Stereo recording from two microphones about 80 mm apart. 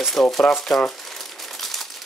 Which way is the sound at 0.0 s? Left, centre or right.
Centre.